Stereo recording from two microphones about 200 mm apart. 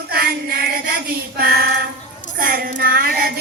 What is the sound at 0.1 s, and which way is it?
Child singing, 50° right (ahead or behind).